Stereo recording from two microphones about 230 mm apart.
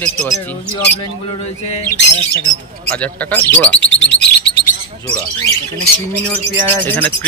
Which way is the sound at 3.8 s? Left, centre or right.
Left.